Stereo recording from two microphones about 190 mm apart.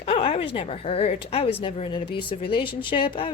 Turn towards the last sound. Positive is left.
turn(degrees=25)  # may be behind; listen again after turning